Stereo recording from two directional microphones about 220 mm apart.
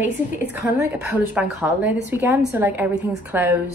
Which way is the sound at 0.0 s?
10° right (ahead or behind).